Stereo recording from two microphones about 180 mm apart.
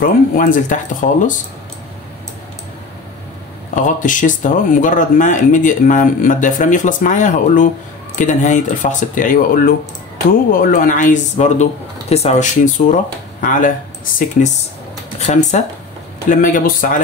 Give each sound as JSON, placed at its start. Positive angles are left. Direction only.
{"t": 0.0, "sound": "speech", "side_deg": 45}
{"t": 3.7, "sound": "speech", "side_deg": 45}